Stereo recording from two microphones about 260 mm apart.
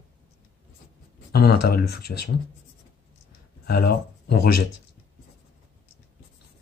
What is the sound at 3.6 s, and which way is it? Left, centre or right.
Speech, left.